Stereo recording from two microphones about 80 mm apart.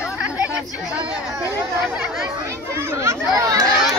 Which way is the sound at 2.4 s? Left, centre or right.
Right.